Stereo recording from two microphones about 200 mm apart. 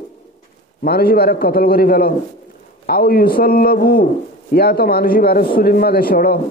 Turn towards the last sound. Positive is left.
turn(degrees=45)  # may be behind; listen again after turning